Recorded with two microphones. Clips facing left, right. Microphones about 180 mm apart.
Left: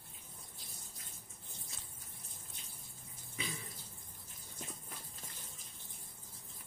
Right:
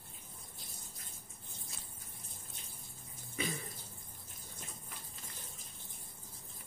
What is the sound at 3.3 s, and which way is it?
Water, 50° right (ahead or behind).